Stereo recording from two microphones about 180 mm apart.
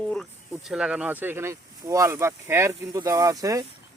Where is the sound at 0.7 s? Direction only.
5° right (ahead or behind).